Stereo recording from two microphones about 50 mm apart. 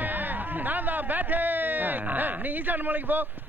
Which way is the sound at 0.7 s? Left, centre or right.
Right.